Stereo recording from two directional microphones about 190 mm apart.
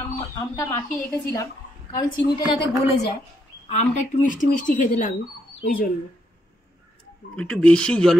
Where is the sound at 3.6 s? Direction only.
40° left (ahead or behind).